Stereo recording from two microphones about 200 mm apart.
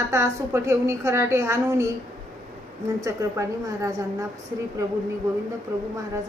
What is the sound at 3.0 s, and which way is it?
A woman's voice, 15° right (ahead or behind).